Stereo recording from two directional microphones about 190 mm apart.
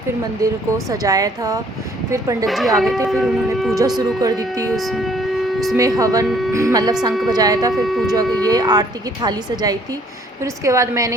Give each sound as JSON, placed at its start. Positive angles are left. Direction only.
{"t": 0.4, "sound": "a woman's voice", "side_deg": -20}
{"t": 2.5, "sound": "shofar", "side_deg": 0}
{"t": 3.8, "sound": "a woman's voice", "side_deg": -20}
{"t": 4.7, "sound": "a sound", "side_deg": 0}
{"t": 5.7, "sound": "a woman's voice", "side_deg": -20}
{"t": 6.2, "sound": "shofar", "side_deg": 0}
{"t": 6.5, "sound": "a woman's voice", "side_deg": -15}
{"t": 7.7, "sound": "shofar", "side_deg": 0}
{"t": 8.1, "sound": "a woman's voice", "side_deg": -20}